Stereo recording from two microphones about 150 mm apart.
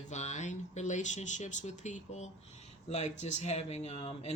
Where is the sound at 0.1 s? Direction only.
50° left (ahead or behind).